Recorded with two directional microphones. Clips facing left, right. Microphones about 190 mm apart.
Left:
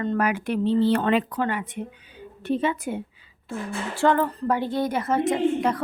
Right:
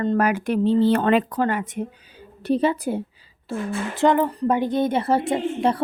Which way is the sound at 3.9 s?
15° right (ahead or behind).